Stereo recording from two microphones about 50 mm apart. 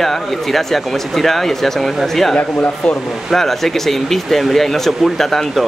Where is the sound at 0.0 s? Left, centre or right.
Centre.